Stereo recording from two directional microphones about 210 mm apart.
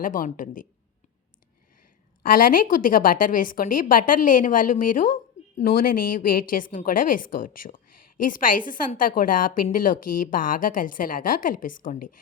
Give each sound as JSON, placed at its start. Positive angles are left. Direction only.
{"t": 0.0, "sound": "a woman's voice", "side_deg": 40}
{"t": 2.2, "sound": "a woman's voice", "side_deg": 40}